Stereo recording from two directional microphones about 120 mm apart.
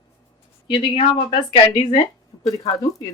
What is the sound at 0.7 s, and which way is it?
Speech, 40° left (ahead or behind).